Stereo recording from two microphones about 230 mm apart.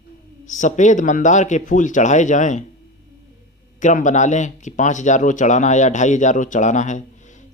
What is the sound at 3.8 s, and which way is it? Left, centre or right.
Speech, left.